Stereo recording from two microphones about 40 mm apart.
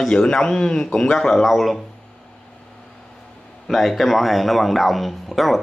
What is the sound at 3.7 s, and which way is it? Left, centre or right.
Speech, centre.